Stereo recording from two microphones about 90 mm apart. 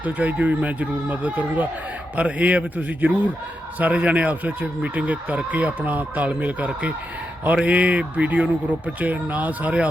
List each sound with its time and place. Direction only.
0.0 s speech: 15° right (ahead or behind)